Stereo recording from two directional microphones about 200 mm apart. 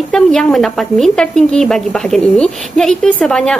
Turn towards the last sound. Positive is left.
turn(degrees=5)  # may be behind; listen again after turning